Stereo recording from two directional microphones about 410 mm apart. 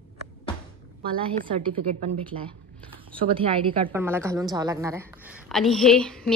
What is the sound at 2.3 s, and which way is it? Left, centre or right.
Speech, right.